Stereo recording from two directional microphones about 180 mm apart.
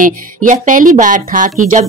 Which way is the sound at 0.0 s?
45° right (ahead or behind).